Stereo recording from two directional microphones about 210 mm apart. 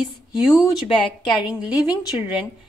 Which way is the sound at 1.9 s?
25° left (ahead or behind).